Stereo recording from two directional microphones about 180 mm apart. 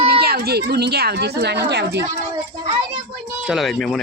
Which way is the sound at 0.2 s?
60° right (ahead or behind).